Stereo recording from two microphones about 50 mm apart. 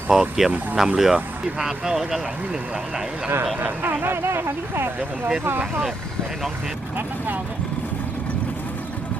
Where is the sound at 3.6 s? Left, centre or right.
Right.